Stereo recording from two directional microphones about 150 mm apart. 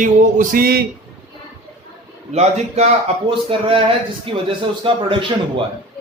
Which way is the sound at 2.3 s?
45° right (ahead or behind).